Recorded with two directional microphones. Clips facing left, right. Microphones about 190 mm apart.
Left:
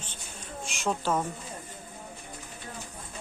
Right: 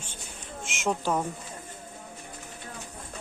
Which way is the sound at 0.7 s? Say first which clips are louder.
Right 1 dB; 15° right (ahead or behind).